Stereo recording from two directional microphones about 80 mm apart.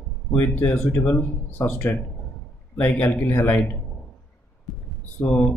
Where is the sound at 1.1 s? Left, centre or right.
Left.